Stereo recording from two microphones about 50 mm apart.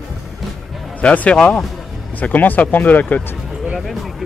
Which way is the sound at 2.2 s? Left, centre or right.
Left.